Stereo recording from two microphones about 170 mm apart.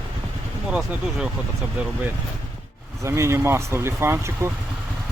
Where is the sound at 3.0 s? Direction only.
15° right (ahead or behind).